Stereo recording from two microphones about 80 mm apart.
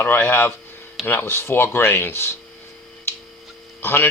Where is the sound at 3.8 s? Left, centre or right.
Left.